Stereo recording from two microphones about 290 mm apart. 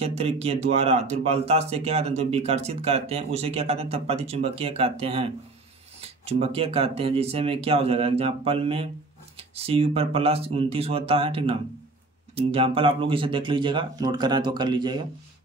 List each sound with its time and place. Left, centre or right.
0.0 s speech: right